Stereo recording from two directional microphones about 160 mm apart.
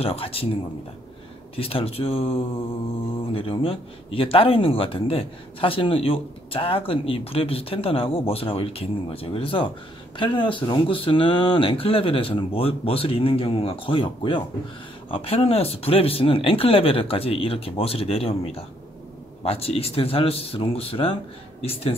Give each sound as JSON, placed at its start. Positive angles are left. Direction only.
{"t": 0.0, "sound": "speech", "side_deg": 35}
{"t": 1.6, "sound": "speech", "side_deg": 35}